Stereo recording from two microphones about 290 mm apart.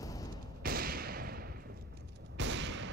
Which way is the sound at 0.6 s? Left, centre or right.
Right.